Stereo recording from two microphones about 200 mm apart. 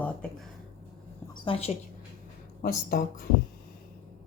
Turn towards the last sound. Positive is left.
turn(degrees=50)  # may be behind; listen again after turning